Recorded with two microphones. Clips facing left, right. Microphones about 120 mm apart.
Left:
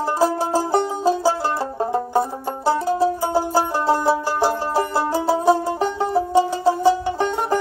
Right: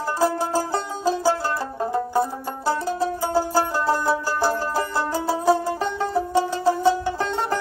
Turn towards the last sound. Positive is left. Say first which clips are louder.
# left 3 dB
turn(degrees=20)  # may be behind; listen again after turning